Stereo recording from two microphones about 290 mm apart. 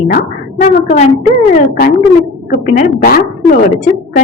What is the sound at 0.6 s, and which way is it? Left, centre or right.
Speech, left.